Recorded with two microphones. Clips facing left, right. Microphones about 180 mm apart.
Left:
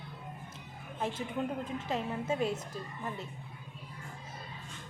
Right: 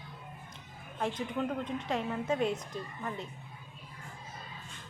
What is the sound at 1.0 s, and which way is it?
A woman's voice, 5° left (ahead or behind).